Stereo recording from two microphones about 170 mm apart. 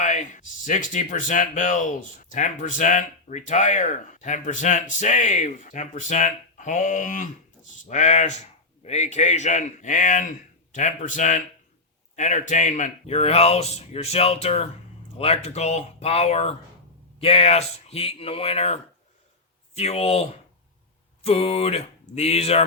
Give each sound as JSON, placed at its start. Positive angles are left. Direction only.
{"t": 0.0, "sound": "speech", "side_deg": 45}
{"t": 21.2, "sound": "speech", "side_deg": 35}